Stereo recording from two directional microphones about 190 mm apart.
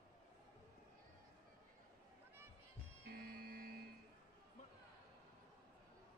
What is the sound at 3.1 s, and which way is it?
Music, 55° right (ahead or behind).